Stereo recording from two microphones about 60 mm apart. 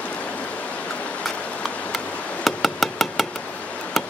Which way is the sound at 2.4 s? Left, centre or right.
Centre.